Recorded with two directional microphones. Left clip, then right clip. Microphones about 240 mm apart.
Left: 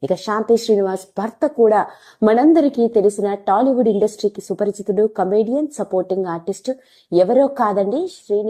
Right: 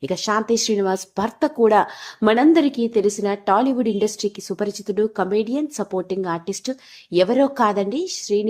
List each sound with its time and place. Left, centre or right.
0.0 s a woman's voice: centre